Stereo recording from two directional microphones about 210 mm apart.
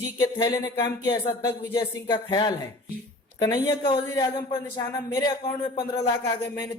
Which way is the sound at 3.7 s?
20° left (ahead or behind).